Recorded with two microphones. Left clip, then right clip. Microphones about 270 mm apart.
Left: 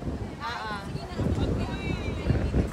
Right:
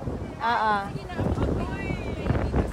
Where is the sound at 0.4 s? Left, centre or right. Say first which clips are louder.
Right 11 dB; centre.